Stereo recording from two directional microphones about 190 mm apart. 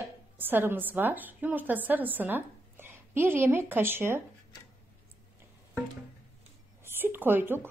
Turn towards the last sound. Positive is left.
turn(degrees=-10)  # may be behind; listen again after turning